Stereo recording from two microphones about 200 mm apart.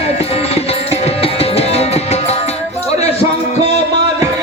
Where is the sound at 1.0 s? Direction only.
30° left (ahead or behind).